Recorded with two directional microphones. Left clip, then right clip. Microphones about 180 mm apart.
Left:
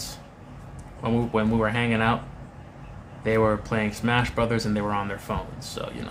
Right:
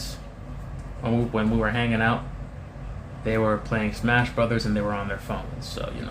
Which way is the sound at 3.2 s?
25° left (ahead or behind).